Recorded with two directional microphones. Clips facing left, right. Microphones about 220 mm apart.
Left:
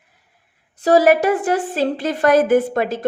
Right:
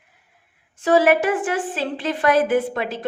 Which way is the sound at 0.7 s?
40° left (ahead or behind).